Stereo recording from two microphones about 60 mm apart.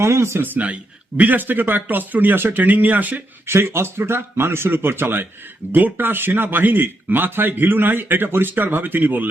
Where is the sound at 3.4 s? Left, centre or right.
Right.